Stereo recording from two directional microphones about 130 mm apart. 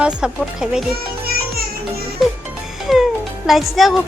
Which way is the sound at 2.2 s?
Centre (ahead or behind).